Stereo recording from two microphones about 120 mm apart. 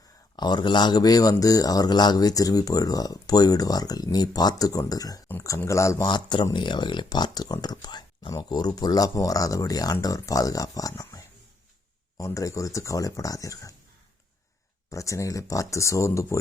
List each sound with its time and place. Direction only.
0.3 s speech: 35° left (ahead or behind)
6.1 s speech: 40° left (ahead or behind)
14.8 s speech: 25° left (ahead or behind)